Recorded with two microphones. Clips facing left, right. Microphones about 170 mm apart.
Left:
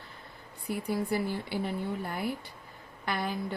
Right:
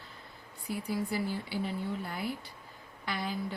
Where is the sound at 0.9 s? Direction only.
55° left (ahead or behind).